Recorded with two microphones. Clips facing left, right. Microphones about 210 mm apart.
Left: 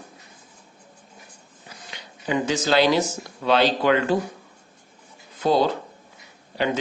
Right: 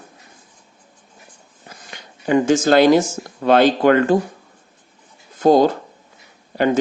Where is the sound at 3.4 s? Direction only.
50° right (ahead or behind).